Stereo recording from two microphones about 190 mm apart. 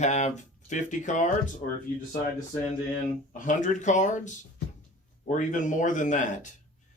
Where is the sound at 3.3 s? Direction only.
40° left (ahead or behind).